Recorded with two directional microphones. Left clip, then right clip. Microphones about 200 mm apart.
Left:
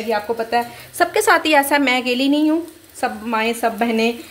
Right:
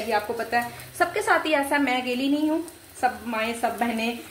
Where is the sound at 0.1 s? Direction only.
45° left (ahead or behind).